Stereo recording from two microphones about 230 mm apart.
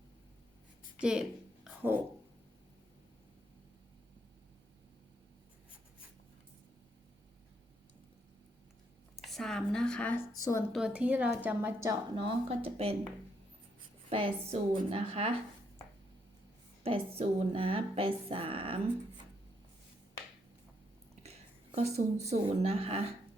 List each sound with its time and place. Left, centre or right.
0.9 s a sound: centre
9.3 s speech: centre
10.7 s speech: centre; by 13.0 s right
14.1 s speech: right
16.8 s speech: right
21.8 s speech: right